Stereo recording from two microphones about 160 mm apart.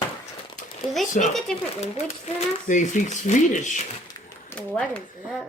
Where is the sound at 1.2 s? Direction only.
50° left (ahead or behind).